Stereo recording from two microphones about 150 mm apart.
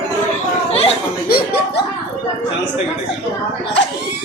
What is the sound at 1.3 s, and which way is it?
Music, 90° left.